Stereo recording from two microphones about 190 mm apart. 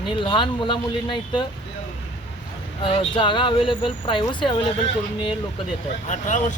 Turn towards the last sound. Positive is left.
turn(degrees=40)  # may be behind; listen again after turning